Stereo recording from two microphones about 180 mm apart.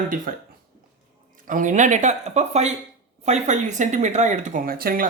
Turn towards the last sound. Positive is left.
turn(degrees=-55)  # may be behind; listen again after turning